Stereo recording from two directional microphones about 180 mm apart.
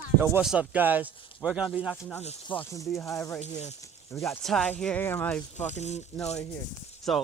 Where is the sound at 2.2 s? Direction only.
30° left (ahead or behind).